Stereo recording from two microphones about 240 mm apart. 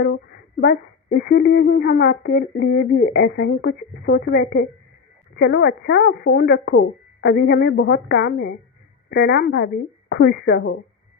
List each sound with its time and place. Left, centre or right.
0.0 s speech: left